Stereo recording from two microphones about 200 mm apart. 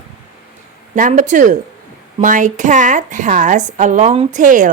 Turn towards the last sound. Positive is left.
turn(degrees=-40)  # may be behind; listen again after turning